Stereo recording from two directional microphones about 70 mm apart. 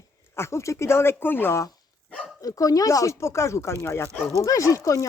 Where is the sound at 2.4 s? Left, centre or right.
Left.